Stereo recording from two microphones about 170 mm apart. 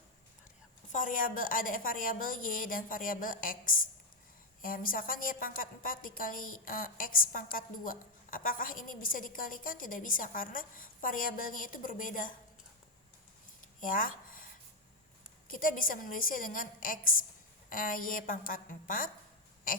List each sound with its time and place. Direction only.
0.9 s a woman's voice: 50° left (ahead or behind)
13.8 s a sound: 55° left (ahead or behind)
15.4 s a woman's voice: 55° left (ahead or behind)